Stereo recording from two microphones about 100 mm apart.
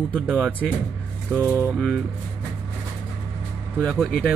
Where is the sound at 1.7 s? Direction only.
5° left (ahead or behind).